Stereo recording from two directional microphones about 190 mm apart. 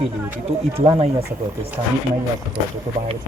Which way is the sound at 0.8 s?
30° right (ahead or behind).